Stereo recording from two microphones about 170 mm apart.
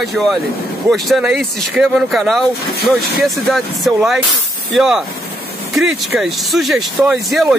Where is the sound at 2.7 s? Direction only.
65° left (ahead or behind).